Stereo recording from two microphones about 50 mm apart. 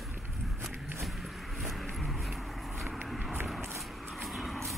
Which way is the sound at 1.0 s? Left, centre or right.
Centre.